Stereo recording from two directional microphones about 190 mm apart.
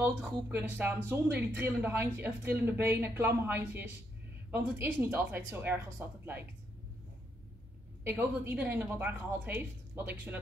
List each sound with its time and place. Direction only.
0.5 s speech: 10° right (ahead or behind)
8.0 s speech: 10° right (ahead or behind)